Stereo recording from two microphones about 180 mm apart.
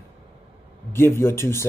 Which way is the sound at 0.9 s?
15° left (ahead or behind).